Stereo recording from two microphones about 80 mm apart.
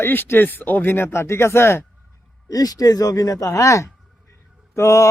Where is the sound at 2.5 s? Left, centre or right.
Left.